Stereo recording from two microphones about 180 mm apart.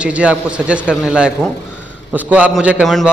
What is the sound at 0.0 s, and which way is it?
A man's voice, 5° right (ahead or behind).